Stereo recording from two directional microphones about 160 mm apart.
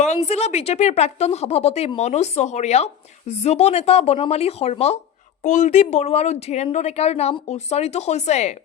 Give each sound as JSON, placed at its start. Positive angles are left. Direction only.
{"t": 0.0, "sound": "a woman's voice", "side_deg": 45}